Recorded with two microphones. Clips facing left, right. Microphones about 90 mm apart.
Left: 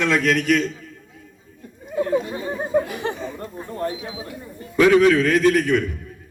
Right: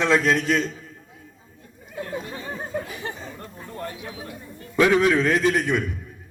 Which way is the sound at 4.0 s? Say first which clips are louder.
Left 3 dB; 15° left (ahead or behind).